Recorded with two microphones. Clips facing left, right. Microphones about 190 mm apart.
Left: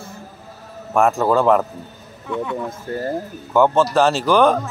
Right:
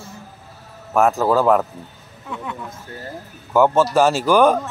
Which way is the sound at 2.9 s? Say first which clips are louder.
Left 10 dB; 55° left (ahead or behind).